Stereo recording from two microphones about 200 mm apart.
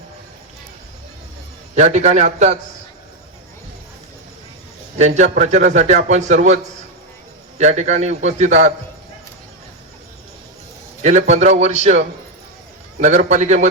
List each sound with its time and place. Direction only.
1.7 s a man's voice: 35° right (ahead or behind)
4.9 s a man's voice: 35° right (ahead or behind)
7.6 s a man's voice: 35° right (ahead or behind)
11.0 s a man's voice: 35° right (ahead or behind)